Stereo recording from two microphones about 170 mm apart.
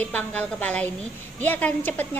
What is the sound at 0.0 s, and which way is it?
A woman's voice, 10° left (ahead or behind).